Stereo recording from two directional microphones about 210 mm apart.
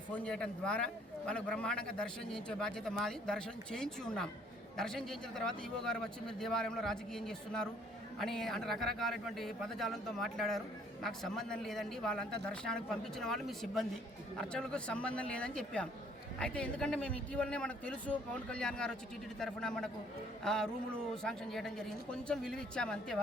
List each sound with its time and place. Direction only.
0.1 s a man's voice: 5° left (ahead or behind)